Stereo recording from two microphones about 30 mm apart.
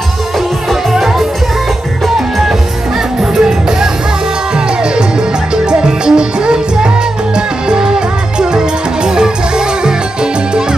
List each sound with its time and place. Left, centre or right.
3.3 s music: centre
5.7 s music: right